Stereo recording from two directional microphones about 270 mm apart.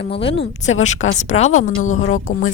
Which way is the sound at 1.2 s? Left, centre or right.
Left.